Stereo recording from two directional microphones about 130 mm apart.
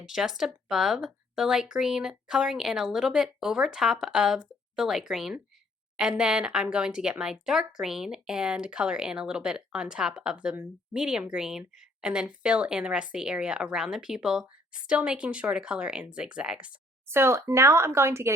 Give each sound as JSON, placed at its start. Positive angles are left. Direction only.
{"t": 0.0, "sound": "speech", "side_deg": -5}
{"t": 17.1, "sound": "speech", "side_deg": -20}